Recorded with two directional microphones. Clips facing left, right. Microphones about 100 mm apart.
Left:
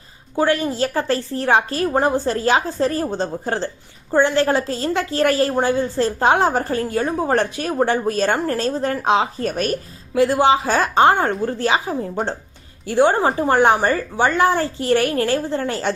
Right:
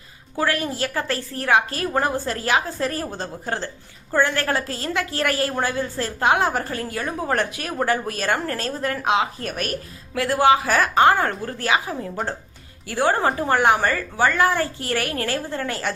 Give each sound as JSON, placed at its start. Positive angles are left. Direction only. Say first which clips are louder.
{"t": 0.3, "sound": "a woman's voice", "louder": "left 5 dB", "side_deg": 25}